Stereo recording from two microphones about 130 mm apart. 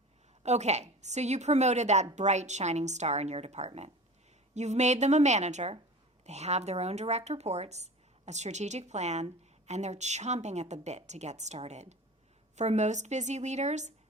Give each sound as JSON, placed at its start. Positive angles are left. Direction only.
{"t": 0.4, "sound": "a woman's voice", "side_deg": -60}